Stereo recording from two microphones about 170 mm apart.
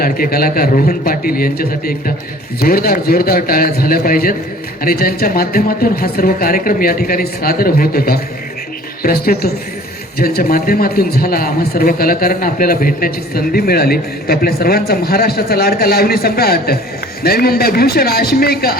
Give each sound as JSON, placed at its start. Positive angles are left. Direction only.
{"t": 0.0, "sound": "a man's voice", "side_deg": 60}